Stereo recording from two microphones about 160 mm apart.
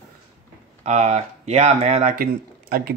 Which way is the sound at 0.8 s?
45° right (ahead or behind).